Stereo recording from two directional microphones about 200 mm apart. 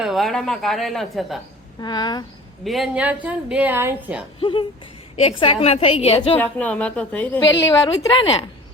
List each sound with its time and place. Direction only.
0.0 s a woman's voice: centre (ahead or behind)
1.8 s a woman's voice: 20° left (ahead or behind)
2.6 s a woman's voice: centre (ahead or behind)
4.4 s a woman's voice: 25° left (ahead or behind)
6.3 s a woman's voice: 5° left (ahead or behind)
8.0 s a woman's voice: 25° left (ahead or behind)